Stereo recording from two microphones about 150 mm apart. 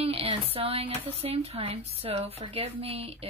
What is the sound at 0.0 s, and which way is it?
Speech, 40° right (ahead or behind).